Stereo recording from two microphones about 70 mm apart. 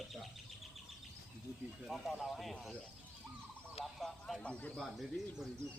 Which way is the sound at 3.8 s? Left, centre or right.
Centre.